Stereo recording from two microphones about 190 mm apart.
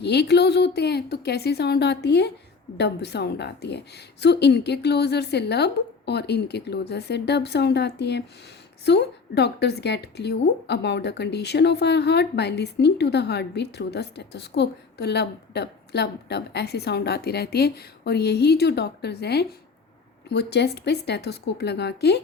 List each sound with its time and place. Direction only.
0.0 s a woman's voice: 60° left (ahead or behind)